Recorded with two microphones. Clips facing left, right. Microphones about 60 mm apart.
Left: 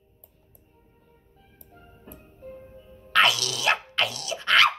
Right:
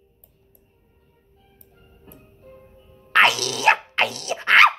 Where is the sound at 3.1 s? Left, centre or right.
Right.